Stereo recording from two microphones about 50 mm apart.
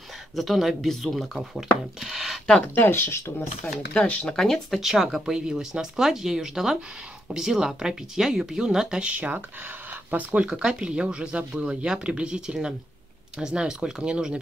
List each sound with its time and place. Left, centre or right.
0.4 s speech: centre
2.0 s a sound: centre
2.6 s speech: left
4.3 s speech: centre
4.6 s speech: centre
9.1 s speech: right
10.5 s speech: centre